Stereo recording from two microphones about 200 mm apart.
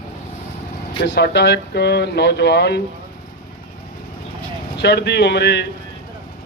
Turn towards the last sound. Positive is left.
turn(degrees=55)  # may be behind; listen again after turning